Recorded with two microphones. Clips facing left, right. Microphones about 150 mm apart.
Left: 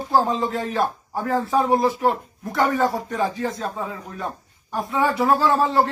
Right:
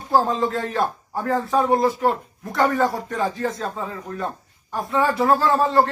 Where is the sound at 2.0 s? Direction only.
5° left (ahead or behind).